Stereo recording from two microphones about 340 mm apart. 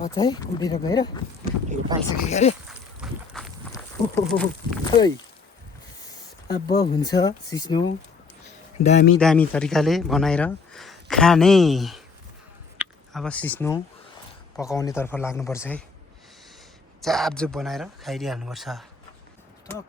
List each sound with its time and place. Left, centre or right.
0.1 s speech: centre
1.9 s speech: centre
2.3 s speech: centre
2.6 s boat: centre
3.7 s speech: centre
9.1 s speech: centre
17.0 s speech: centre